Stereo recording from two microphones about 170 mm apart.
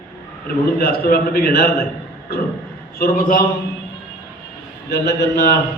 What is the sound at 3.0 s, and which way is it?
Speech, 55° left (ahead or behind).